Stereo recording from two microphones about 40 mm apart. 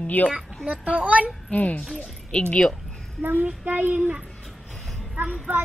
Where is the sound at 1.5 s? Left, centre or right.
Left.